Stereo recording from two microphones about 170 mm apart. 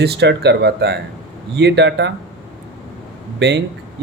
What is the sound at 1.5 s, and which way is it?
Speech, 90° right.